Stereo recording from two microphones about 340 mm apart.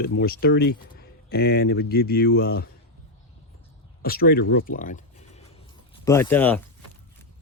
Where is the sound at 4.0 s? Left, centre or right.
Left.